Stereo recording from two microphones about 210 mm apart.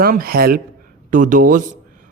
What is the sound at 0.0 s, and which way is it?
Speech, 45° right (ahead or behind).